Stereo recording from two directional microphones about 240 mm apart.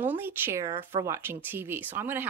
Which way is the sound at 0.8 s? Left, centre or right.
Right.